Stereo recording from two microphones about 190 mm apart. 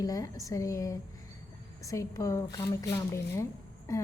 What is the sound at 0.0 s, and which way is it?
A woman's voice, 20° left (ahead or behind).